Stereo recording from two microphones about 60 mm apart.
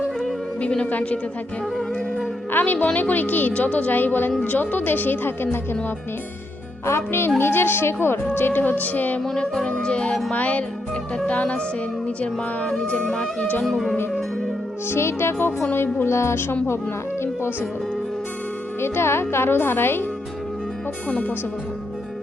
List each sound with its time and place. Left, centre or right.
0.6 s music: centre
0.9 s a woman's voice: left
2.5 s a woman's voice: left
6.8 s a woman's voice: left
9.2 s music: centre
10.3 s a woman's voice: left
12.7 s music: centre
13.6 s music: centre
14.8 s speech: left
18.8 s a woman's voice: left
21.1 s a woman's voice: left